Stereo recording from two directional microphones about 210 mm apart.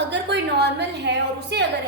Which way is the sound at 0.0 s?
55° right (ahead or behind).